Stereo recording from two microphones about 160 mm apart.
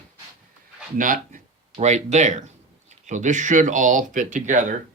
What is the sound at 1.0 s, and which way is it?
Speech, 55° right (ahead or behind).